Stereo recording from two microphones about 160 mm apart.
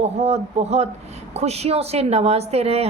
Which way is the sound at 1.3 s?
40° right (ahead or behind).